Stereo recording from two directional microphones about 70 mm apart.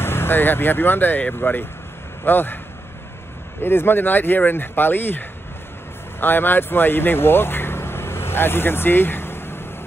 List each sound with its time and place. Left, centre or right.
0.0 s speech: left
3.6 s speech: left